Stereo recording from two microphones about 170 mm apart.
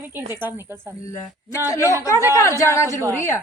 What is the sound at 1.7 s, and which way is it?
A woman's voice, 20° left (ahead or behind).